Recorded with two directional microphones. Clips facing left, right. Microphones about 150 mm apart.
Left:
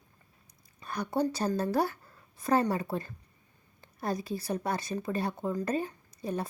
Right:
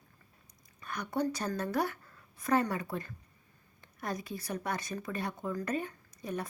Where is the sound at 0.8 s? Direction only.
30° left (ahead or behind).